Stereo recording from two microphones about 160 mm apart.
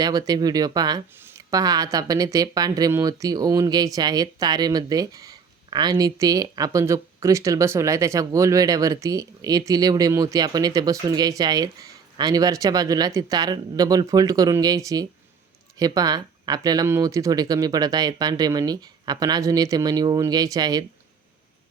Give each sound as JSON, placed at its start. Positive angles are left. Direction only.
{"t": 0.0, "sound": "speech", "side_deg": -25}